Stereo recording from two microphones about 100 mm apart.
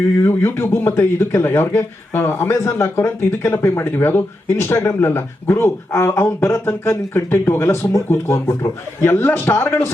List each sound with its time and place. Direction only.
0.2 s a man's voice: 25° left (ahead or behind)